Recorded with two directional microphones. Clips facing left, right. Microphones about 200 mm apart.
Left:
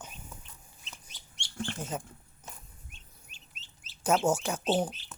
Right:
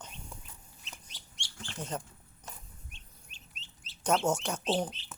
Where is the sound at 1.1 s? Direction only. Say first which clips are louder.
Left 1 dB; 55° left (ahead or behind).